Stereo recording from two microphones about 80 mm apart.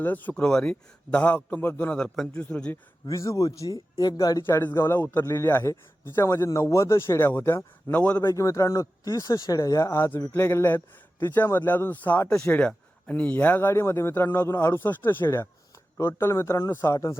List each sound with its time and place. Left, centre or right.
0.0 s a man's voice: left
2.0 s a man's voice: centre
3.1 s speech: left
4.4 s a man's voice: left
8.3 s a man's voice: left